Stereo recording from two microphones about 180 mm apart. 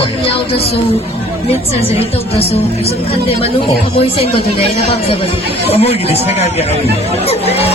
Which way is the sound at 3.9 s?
30° left (ahead or behind).